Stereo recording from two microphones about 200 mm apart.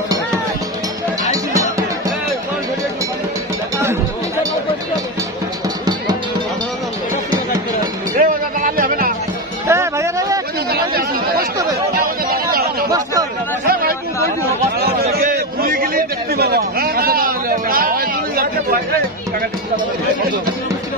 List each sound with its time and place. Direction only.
1.3 s music: 15° right (ahead or behind)
3.7 s music: 15° right (ahead or behind)
8.2 s music: 45° right (ahead or behind)
9.7 s a sound: 15° right (ahead or behind)
10.7 s chatter: 50° right (ahead or behind)
12.9 s chatter: 20° right (ahead or behind)
13.7 s a sound: 50° right (ahead or behind)